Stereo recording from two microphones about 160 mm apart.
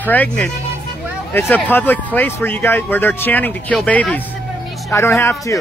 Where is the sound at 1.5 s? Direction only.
10° left (ahead or behind).